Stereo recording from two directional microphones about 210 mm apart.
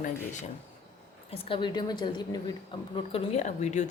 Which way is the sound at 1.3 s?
25° left (ahead or behind).